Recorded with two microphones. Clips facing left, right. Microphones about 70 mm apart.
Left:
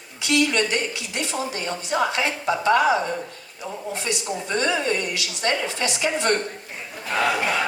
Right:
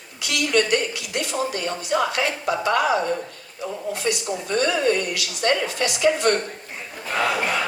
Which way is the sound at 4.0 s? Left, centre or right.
Left.